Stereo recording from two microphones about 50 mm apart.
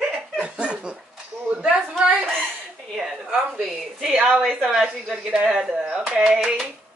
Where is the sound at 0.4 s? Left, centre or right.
Right.